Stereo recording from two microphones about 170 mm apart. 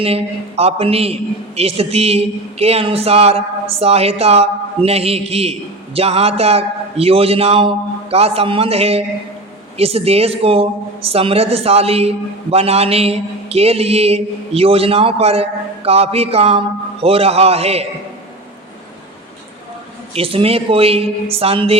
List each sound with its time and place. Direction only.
0.0 s a man's voice: 35° right (ahead or behind)
20.1 s a man's voice: 35° right (ahead or behind)